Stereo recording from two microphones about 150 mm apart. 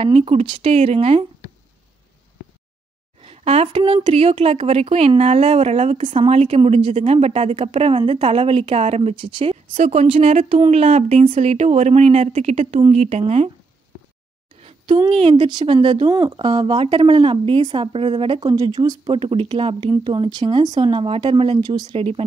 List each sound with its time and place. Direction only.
0.0 s speech: 40° right (ahead or behind)
3.2 s speech: 45° right (ahead or behind)
15.0 s speech: 35° right (ahead or behind)
21.9 s speech: 40° right (ahead or behind)